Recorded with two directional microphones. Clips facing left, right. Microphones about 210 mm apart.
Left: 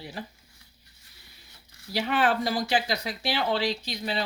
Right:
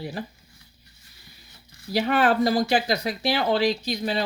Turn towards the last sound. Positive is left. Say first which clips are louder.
# right 5 dB
turn(degrees=-45)  # may be behind; listen again after turning